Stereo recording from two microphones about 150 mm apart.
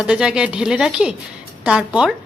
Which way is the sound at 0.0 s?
5° right (ahead or behind).